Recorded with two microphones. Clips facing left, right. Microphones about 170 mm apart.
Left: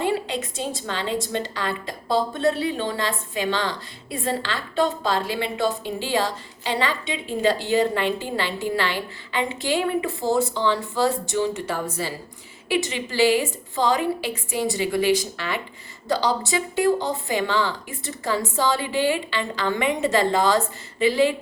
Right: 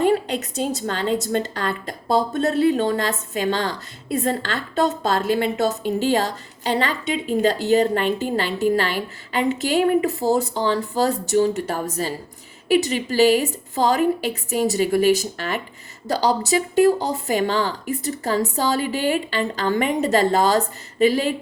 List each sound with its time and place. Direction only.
0.0 s a woman's voice: 45° right (ahead or behind)